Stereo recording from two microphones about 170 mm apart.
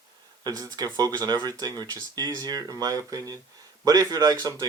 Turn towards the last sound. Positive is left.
turn(degrees=-25)  # may be behind; listen again after turning